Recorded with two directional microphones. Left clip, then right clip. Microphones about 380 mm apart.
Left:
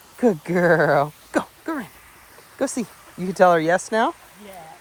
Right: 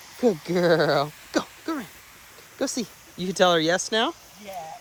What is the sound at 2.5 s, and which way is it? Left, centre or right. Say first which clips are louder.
Speech: left 3 dB; centre.